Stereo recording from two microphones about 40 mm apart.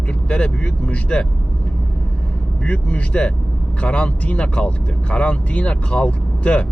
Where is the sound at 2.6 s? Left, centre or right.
Left.